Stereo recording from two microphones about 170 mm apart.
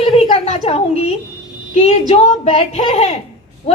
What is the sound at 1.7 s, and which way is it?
A woman's voice, 40° left (ahead or behind).